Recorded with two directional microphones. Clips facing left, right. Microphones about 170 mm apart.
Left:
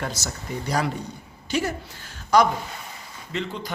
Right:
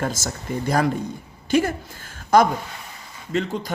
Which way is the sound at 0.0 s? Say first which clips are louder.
Right 4 dB; 45° right (ahead or behind).